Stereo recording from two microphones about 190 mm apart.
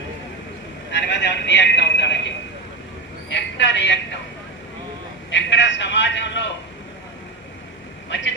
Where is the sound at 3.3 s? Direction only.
65° left (ahead or behind).